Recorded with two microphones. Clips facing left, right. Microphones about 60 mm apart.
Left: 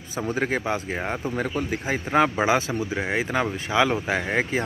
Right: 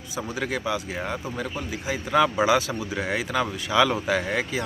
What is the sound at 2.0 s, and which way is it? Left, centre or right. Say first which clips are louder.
Speech: even; left.